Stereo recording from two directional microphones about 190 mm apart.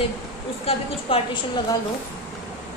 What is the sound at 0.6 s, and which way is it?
Speech, 30° left (ahead or behind).